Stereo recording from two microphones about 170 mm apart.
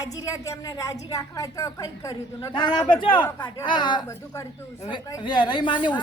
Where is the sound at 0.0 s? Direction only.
20° left (ahead or behind).